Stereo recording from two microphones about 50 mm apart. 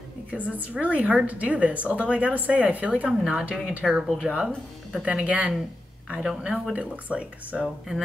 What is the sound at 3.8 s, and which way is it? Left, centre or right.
Speech, centre.